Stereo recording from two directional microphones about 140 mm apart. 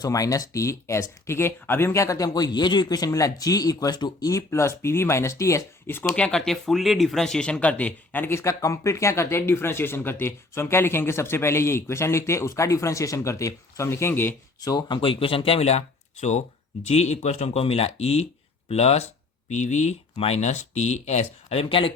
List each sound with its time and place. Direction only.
0.0 s speech: 25° left (ahead or behind)
6.1 s speech: 5° left (ahead or behind)
14.6 s speech: 30° left (ahead or behind); by 15.8 s 45° left (ahead or behind)
16.8 s speech: 50° left (ahead or behind)